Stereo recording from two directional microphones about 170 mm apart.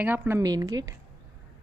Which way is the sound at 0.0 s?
10° right (ahead or behind).